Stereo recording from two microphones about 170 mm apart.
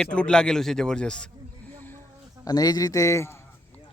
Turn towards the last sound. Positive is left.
turn(degrees=15)  # may be behind; listen again after turning